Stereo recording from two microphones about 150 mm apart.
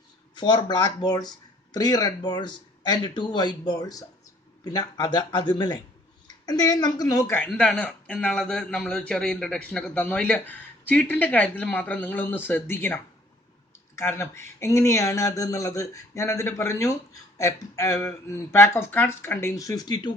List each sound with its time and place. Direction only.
0.3 s speech: 30° left (ahead or behind)